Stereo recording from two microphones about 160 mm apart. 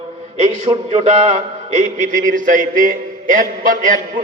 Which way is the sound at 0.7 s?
20° right (ahead or behind).